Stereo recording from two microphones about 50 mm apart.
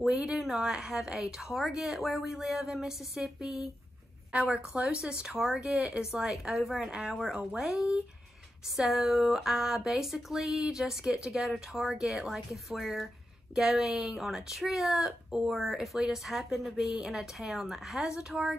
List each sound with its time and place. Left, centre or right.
0.0 s speech: centre
4.3 s a woman's voice: right
8.7 s speech: centre